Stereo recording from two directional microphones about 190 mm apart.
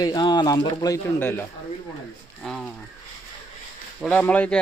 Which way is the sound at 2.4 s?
Centre (ahead or behind).